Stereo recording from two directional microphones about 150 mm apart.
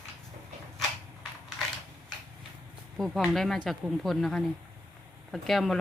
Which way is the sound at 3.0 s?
Centre (ahead or behind).